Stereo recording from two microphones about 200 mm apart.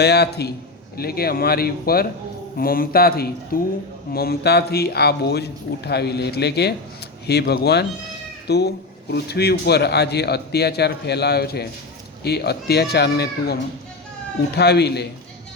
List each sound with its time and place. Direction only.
0.0 s a man's voice: 55° left (ahead or behind)